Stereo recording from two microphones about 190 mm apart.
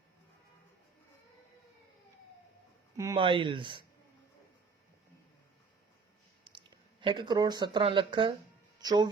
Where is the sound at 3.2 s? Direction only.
25° right (ahead or behind).